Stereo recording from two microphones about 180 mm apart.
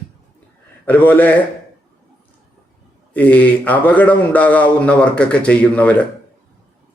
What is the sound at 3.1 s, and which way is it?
Speech, 10° left (ahead or behind).